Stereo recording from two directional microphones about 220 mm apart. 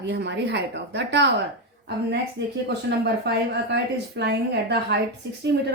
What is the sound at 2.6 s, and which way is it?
A woman's voice, 50° right (ahead or behind).